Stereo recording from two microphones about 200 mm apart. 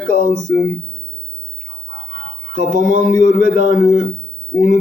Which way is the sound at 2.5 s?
40° right (ahead or behind).